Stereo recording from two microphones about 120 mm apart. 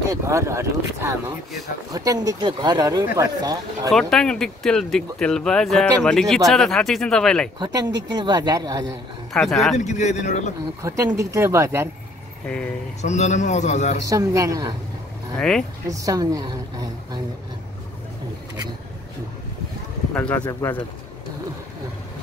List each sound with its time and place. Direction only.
0.1 s speech: 25° right (ahead or behind)
3.9 s speech: 5° left (ahead or behind)
7.5 s speech: 35° right (ahead or behind)
9.3 s speech: 5° left (ahead or behind)
9.8 s speech: 75° left (ahead or behind)
10.8 s speech: 25° right (ahead or behind)
13.0 s a man's voice: 75° left (ahead or behind)
14.0 s speech: 25° right (ahead or behind)
15.3 s speech: 5° left (ahead or behind)
15.9 s speech: 30° right (ahead or behind)
20.2 s speech: 10° left (ahead or behind)